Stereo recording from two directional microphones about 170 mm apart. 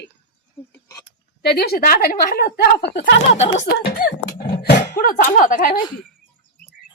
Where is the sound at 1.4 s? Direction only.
70° left (ahead or behind).